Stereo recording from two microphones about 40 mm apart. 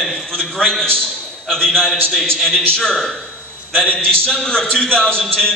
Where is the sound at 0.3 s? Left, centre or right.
Centre.